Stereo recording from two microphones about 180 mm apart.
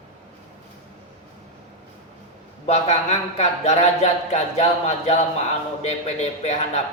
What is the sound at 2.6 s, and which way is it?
Speech, 40° left (ahead or behind).